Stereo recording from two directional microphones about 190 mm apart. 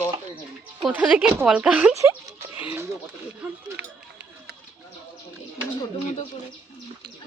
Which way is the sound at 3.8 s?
60° right (ahead or behind).